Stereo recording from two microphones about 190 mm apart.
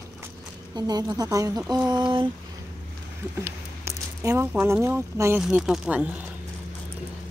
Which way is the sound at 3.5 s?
15° right (ahead or behind).